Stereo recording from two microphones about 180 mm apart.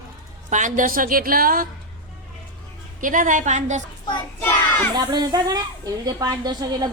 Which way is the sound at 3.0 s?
45° right (ahead or behind).